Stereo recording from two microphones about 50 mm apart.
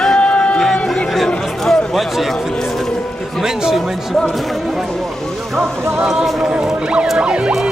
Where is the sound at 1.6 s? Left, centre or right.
Centre.